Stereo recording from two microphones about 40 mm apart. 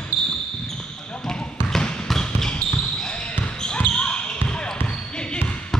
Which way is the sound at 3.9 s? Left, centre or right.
Left.